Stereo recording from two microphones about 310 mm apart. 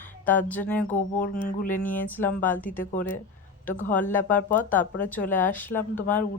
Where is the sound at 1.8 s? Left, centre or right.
Centre.